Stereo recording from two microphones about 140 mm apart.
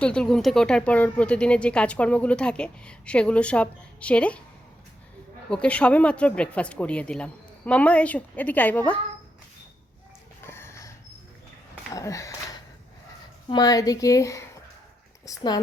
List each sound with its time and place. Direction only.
0.0 s speech: 5° left (ahead or behind)
5.5 s speech: 10° left (ahead or behind)
10.4 s a sound: 15° left (ahead or behind)
11.9 s a woman's voice: 25° left (ahead or behind)